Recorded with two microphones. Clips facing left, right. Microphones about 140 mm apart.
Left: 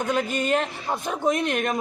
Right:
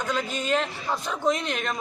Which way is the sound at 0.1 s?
55° left (ahead or behind).